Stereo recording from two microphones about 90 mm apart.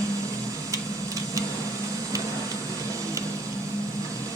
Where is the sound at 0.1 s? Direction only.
40° right (ahead or behind).